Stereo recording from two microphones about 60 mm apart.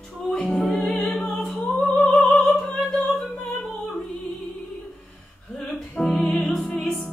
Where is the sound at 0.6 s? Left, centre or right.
Left.